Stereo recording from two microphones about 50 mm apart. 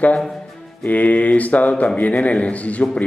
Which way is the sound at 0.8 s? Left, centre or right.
Left.